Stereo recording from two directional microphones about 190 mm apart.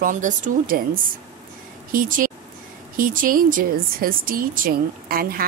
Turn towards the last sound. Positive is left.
turn(degrees=-50)  # may be behind; listen again after turning